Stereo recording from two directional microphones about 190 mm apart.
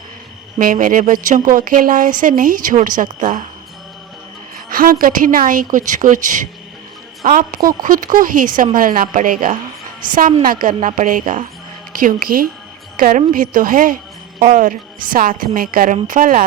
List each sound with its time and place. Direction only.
0.6 s a woman's voice: 45° right (ahead or behind)
4.7 s a woman's voice: 50° right (ahead or behind)